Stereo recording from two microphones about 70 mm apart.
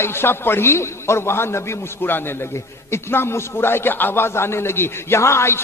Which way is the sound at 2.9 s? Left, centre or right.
Left.